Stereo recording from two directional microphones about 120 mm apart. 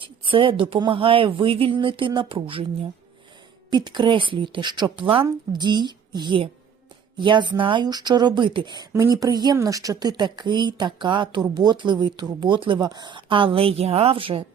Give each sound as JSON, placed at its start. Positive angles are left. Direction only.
{"t": 0.0, "sound": "speech", "side_deg": -45}
{"t": 3.7, "sound": "speech", "side_deg": -40}